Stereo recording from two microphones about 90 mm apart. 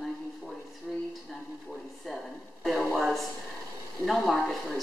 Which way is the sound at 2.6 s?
5° left (ahead or behind).